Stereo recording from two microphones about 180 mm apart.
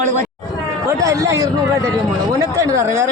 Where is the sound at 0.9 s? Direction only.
15° right (ahead or behind).